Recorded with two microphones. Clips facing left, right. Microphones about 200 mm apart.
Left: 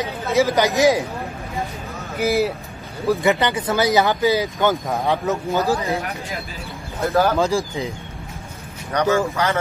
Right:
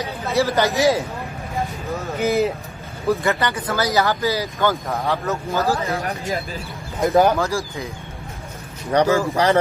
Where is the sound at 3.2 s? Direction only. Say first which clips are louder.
Left 3 dB; 15° left (ahead or behind).